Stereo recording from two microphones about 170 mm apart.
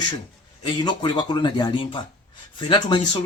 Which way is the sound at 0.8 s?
25° left (ahead or behind).